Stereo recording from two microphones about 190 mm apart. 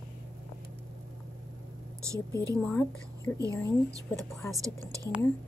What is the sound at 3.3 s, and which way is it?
A woman's voice, 20° right (ahead or behind).